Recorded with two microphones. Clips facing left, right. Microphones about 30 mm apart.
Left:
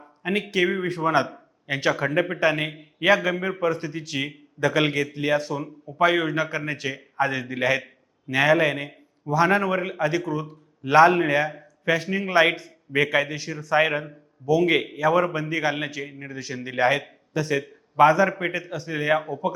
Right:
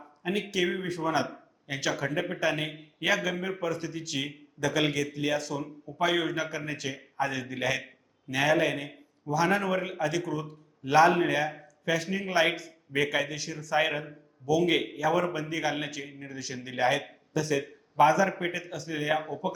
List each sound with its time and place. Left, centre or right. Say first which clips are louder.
0.2 s a man's voice: left 6 dB; left; by 19.5 s centre